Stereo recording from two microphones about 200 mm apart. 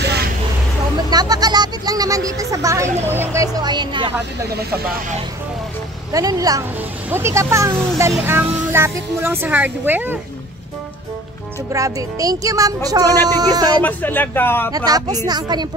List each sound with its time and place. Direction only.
1.1 s speech: 20° right (ahead or behind)
6.1 s a woman's voice: 20° right (ahead or behind)
11.7 s a woman's voice: 15° right (ahead or behind)
13.8 s speech: 10° left (ahead or behind)
14.9 s speech: 20° right (ahead or behind)